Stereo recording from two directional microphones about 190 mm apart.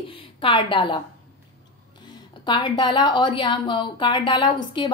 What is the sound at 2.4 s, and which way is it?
A woman's voice, 25° left (ahead or behind).